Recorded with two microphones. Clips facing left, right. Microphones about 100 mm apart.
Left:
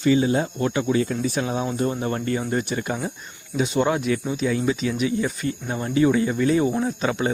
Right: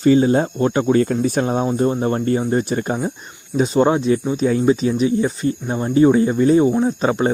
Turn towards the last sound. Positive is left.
turn(degrees=-35)  # may be behind; listen again after turning